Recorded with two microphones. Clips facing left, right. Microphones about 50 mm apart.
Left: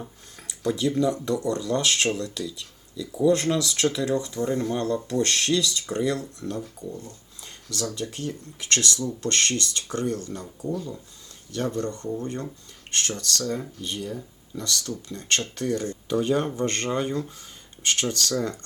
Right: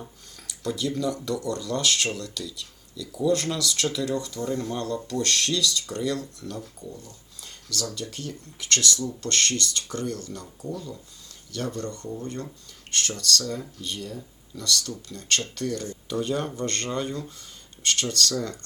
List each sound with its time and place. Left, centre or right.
0.4 s speech: left
6.9 s a sound: left
7.9 s speech: left
11.5 s speech: left